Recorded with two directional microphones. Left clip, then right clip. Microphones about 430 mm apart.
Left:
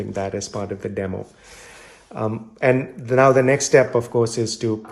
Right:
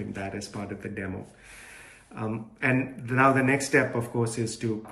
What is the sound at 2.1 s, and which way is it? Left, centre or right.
Speech, centre.